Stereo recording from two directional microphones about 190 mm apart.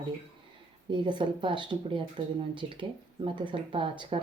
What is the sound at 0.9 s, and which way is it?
Speech, 25° right (ahead or behind).